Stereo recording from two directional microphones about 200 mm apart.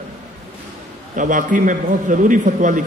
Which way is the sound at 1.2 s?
40° right (ahead or behind).